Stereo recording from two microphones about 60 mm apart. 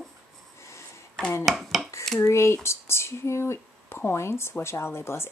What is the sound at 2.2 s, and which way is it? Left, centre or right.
Speech, left.